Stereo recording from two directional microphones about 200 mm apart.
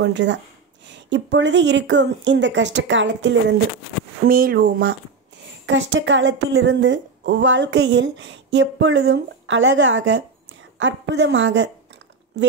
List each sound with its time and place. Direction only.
0.0 s speech: 60° right (ahead or behind)
4.3 s speech: 45° right (ahead or behind)
5.7 s a woman's voice: 70° right (ahead or behind)